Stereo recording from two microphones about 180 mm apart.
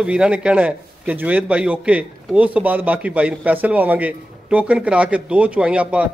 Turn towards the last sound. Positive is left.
turn(degrees=-5)  # may be behind; listen again after turning